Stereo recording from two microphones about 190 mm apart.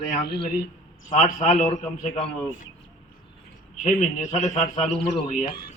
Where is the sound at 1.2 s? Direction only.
40° left (ahead or behind).